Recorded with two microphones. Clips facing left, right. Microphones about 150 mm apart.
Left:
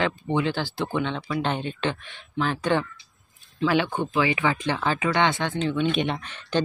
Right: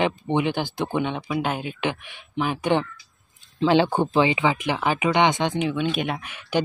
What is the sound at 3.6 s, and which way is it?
Speech, 30° right (ahead or behind).